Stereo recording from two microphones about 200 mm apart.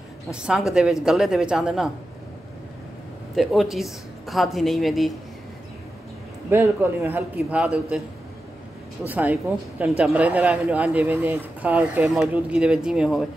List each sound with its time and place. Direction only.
0.3 s a woman's voice: 5° right (ahead or behind)
3.3 s a woman's voice: centre (ahead or behind)
6.5 s a woman's voice: 10° right (ahead or behind)
9.1 s speech: 10° right (ahead or behind)